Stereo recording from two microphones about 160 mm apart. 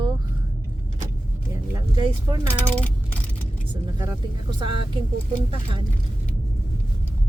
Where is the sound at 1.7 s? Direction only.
30° right (ahead or behind).